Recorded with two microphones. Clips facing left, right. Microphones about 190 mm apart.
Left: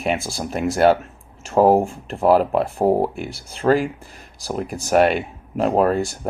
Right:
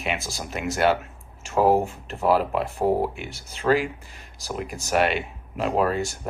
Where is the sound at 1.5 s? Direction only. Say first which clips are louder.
Left 5 dB; 45° left (ahead or behind).